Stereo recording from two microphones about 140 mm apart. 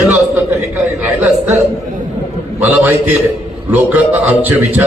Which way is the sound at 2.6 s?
15° right (ahead or behind).